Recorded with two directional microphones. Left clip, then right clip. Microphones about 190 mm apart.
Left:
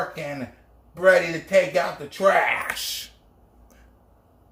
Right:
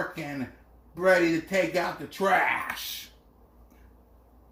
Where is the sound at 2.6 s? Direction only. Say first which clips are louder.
Left 5 dB; 30° left (ahead or behind).